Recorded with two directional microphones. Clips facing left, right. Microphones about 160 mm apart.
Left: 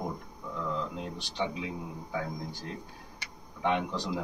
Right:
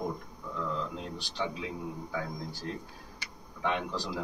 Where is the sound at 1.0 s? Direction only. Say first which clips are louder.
Left 2 dB; 15° left (ahead or behind).